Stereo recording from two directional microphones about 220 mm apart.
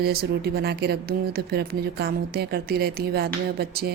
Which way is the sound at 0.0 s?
45° right (ahead or behind).